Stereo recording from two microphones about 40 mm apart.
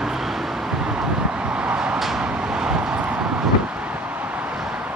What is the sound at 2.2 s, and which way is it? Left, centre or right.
Vehicle, right.